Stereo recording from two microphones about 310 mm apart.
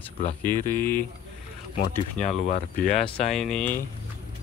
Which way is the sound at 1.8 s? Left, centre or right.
Left.